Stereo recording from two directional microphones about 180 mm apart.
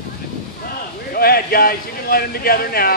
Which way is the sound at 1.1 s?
55° left (ahead or behind).